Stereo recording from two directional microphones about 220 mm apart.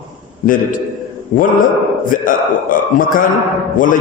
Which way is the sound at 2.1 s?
40° left (ahead or behind).